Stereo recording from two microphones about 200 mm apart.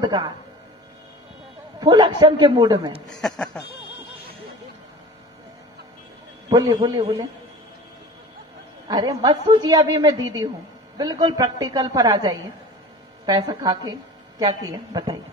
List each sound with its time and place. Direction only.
0.0 s a woman's voice: 20° right (ahead or behind)
1.8 s a woman's voice: 25° right (ahead or behind)
3.1 s speech: 5° left (ahead or behind)
6.5 s a woman's voice: 20° right (ahead or behind)
8.8 s a woman's voice: 20° right (ahead or behind)